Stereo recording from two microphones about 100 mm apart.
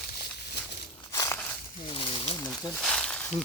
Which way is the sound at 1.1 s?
35° left (ahead or behind).